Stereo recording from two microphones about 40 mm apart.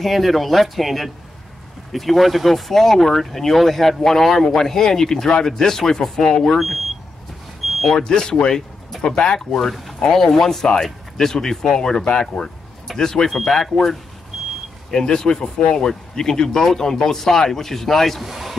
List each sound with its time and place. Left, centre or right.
0.0 s speech: centre
8.0 s speech: centre
9.6 s speech: centre
14.3 s vehicle: centre
14.9 s speech: centre
18.2 s speech: centre